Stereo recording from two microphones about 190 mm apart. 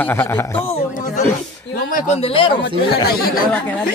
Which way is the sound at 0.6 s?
35° left (ahead or behind).